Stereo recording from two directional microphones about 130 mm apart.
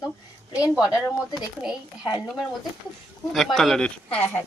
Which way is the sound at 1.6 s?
Centre (ahead or behind).